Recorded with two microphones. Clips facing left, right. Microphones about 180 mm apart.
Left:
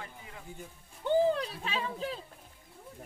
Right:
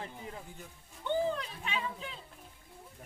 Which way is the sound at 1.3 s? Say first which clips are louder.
Left 3 dB; 35° left (ahead or behind).